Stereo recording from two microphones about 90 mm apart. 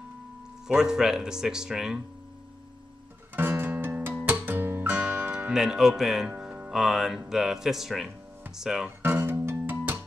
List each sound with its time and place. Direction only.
0.7 s speech: 10° right (ahead or behind)
3.3 s music: 25° right (ahead or behind)
5.5 s a man's voice: 5° right (ahead or behind)
6.3 s music: 20° right (ahead or behind)
6.7 s a man's voice: 5° right (ahead or behind)
9.0 s music: 25° right (ahead or behind)